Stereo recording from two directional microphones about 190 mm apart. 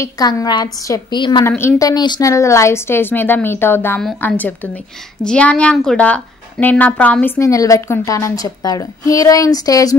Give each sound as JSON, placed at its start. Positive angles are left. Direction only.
{"t": 0.0, "sound": "a woman's voice", "side_deg": 20}
{"t": 1.5, "sound": "a woman's voice", "side_deg": 15}